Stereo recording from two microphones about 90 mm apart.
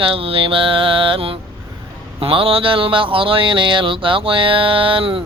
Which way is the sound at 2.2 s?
90° right.